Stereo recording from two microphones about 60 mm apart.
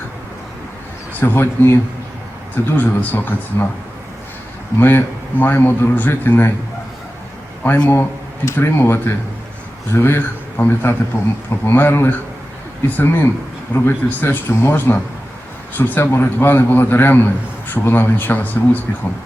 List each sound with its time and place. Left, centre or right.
1.2 s speech: left
4.8 s speech: left
7.6 s a man's voice: left